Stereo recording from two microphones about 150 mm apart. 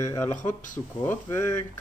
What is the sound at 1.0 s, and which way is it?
Speech, 15° left (ahead or behind).